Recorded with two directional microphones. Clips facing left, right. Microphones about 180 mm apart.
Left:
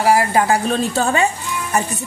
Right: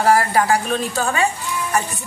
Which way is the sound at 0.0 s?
15° left (ahead or behind).